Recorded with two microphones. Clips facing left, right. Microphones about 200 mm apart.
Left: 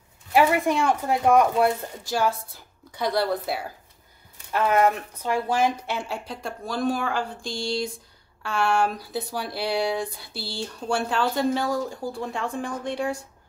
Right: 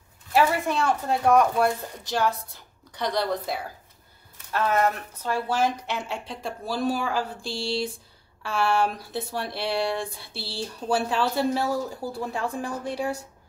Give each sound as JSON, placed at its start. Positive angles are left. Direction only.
{"t": 0.3, "sound": "a woman's voice", "side_deg": 15}
{"t": 7.4, "sound": "a sound", "side_deg": -35}
{"t": 8.4, "sound": "speech", "side_deg": 0}